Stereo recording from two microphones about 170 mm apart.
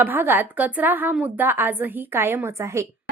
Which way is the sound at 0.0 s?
10° right (ahead or behind).